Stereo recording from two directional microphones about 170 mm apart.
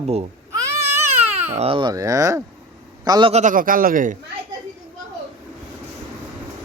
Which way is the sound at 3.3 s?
45° right (ahead or behind).